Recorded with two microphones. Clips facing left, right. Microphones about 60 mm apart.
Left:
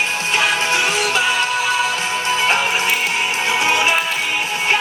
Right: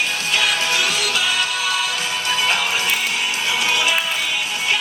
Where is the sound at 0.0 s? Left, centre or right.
Left.